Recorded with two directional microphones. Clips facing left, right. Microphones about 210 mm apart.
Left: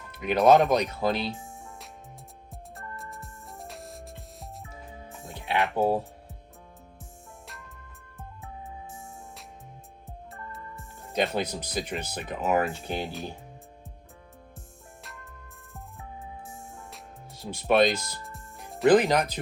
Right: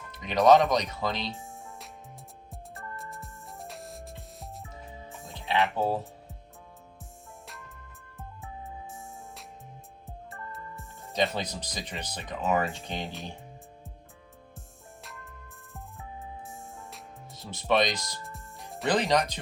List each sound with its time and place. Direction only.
0.1 s speech: 10° left (ahead or behind)
2.5 s music: centre (ahead or behind)
5.3 s music: 15° left (ahead or behind)
5.7 s speech: 15° left (ahead or behind)
7.4 s music: centre (ahead or behind)
11.3 s speech: 10° left (ahead or behind)
15.0 s music: centre (ahead or behind)
17.3 s speech: 10° left (ahead or behind)